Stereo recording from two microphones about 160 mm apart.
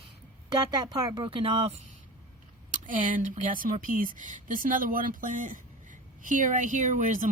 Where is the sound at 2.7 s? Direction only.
55° right (ahead or behind).